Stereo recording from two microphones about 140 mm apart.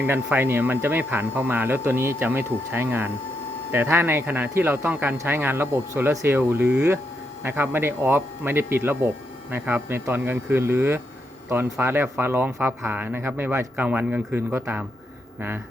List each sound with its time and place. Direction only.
0.0 s speech: 10° right (ahead or behind)